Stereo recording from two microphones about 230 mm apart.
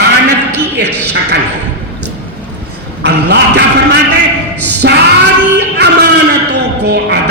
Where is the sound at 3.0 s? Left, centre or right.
Right.